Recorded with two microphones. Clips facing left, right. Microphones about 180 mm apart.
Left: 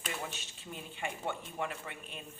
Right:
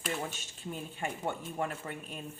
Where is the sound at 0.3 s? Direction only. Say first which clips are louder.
Right 4 dB; 45° right (ahead or behind).